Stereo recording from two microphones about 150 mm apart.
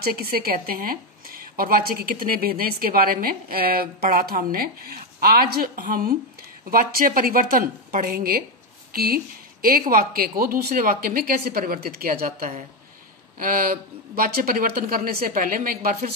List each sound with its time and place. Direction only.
0.0 s speech: 75° right (ahead or behind)
12.4 s speech: 55° right (ahead or behind)
13.4 s speech: 70° right (ahead or behind)